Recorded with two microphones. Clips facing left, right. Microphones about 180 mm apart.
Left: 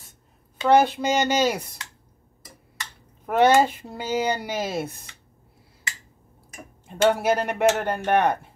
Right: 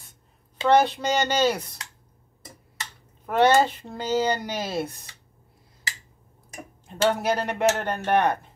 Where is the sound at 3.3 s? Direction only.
10° left (ahead or behind).